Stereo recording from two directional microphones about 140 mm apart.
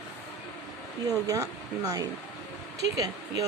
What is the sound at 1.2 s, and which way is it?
Speech, 25° right (ahead or behind).